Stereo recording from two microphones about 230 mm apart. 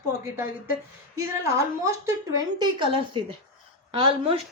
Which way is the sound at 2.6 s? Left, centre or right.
Right.